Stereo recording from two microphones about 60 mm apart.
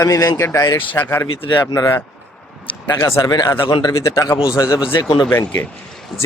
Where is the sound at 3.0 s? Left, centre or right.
Left.